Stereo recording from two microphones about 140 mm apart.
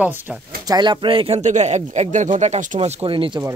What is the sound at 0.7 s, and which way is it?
Speech, 30° right (ahead or behind).